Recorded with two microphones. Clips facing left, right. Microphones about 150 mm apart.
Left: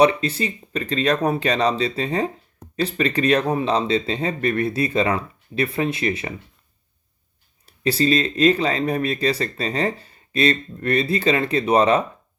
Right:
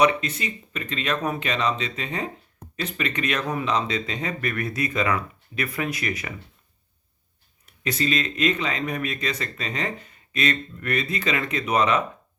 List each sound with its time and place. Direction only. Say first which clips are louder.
0.0 s speech: left 4 dB; 30° left (ahead or behind)
7.6 s speech: left 6 dB; 30° left (ahead or behind)